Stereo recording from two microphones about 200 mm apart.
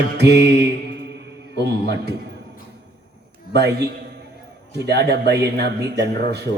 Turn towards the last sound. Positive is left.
turn(degrees=-55)  # may be behind; listen again after turning